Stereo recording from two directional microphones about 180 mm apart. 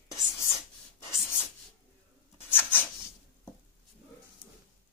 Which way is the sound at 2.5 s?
10° left (ahead or behind).